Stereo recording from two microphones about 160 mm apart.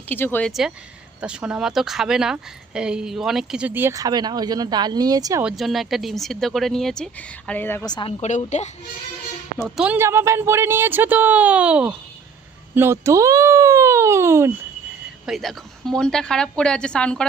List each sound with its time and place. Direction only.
0.1 s speech: 10° left (ahead or behind)
1.2 s speech: 5° right (ahead or behind); by 5.4 s 25° right (ahead or behind)
5.4 s speech: 5° right (ahead or behind)
8.2 s a woman's voice: 45° left (ahead or behind)
9.7 s speech: 10° right (ahead or behind)
15.3 s speech: centre (ahead or behind)